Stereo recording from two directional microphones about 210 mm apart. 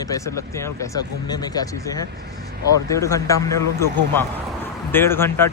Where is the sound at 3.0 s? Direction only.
15° left (ahead or behind).